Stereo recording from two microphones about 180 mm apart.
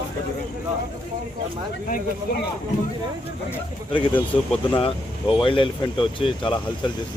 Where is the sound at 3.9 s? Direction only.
25° left (ahead or behind).